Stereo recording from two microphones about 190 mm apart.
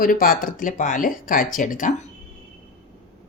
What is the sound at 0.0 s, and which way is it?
Speech, 45° left (ahead or behind).